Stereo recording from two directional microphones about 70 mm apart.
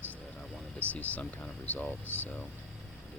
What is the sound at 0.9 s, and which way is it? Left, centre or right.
Speech, left.